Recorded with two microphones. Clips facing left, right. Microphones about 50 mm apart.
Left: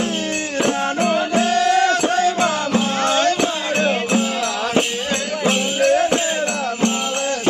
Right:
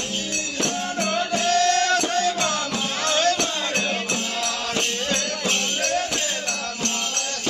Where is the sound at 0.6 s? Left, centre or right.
Centre.